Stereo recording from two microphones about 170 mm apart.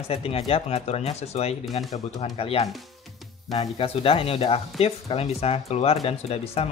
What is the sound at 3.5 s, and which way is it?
Speech, 25° left (ahead or behind).